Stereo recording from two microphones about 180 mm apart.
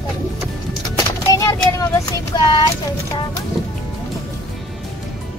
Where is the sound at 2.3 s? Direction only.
25° left (ahead or behind).